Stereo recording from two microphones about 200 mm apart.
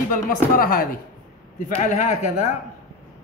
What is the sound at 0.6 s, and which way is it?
A man's voice, 45° left (ahead or behind).